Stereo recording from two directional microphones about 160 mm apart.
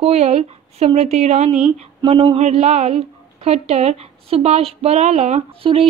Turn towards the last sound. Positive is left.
turn(degrees=-35)  # may be behind; listen again after turning